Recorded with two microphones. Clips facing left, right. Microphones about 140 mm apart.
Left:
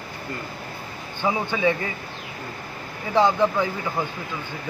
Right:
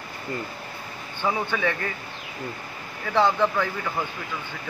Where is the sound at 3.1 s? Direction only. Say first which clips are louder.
Left 2 dB; 15° left (ahead or behind).